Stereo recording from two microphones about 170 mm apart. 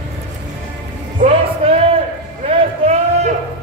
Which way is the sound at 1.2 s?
35° right (ahead or behind).